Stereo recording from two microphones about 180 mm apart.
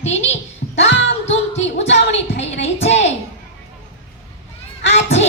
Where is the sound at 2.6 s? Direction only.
35° left (ahead or behind).